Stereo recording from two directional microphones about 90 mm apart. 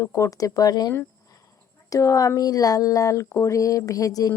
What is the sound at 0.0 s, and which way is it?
Speech, 35° left (ahead or behind).